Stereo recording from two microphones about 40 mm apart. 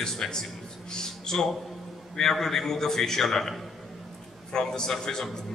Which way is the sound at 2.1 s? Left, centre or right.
Centre.